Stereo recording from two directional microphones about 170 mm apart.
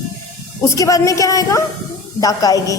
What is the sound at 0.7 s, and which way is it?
A woman's voice, 20° left (ahead or behind).